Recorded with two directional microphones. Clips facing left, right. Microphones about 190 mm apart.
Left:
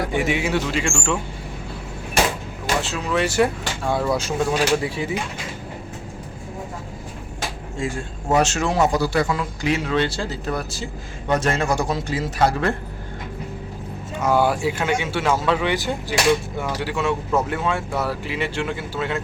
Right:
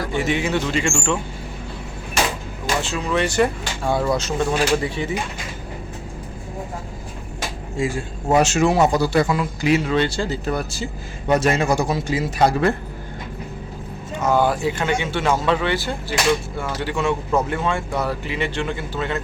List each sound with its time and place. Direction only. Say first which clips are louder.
0.1 s speech: even; 10° left (ahead or behind)
2.8 s speech: right 2 dB; centre (ahead or behind)
7.8 s a man's voice: right 4 dB; 10° right (ahead or behind)
9.0 s speech: right 2 dB; 20° right (ahead or behind)
9.6 s a man's voice: right 3 dB; 5° right (ahead or behind)
14.2 s speech: even; 10° left (ahead or behind)
15.6 s speech: even; 15° left (ahead or behind)